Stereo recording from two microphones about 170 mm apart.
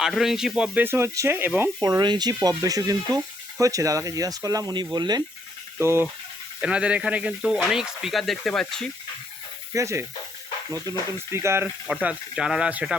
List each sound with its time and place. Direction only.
0.0 s speech: centre (ahead or behind)
1.8 s speech: 25° right (ahead or behind); by 8.9 s 5° left (ahead or behind)
9.7 s speech: 15° right (ahead or behind)
11.3 s speech: 15° right (ahead or behind)